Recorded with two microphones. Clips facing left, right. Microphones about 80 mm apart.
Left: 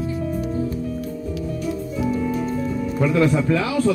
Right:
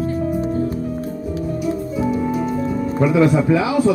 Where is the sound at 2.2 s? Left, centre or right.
Centre.